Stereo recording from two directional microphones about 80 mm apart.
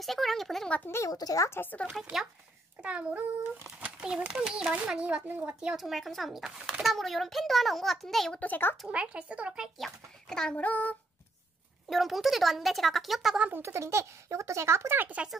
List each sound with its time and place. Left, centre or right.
0.0 s a child's voice: centre
0.8 s speech: left
1.1 s speech: left
1.6 s child singing: left
2.8 s a child's voice: centre
5.8 s a child's voice: centre
8.4 s child singing: left
8.8 s a child's voice: centre
9.8 s a child's voice: centre
10.6 s child singing: centre
11.9 s a child's voice: centre
13.6 s speech: right
15.0 s speech: centre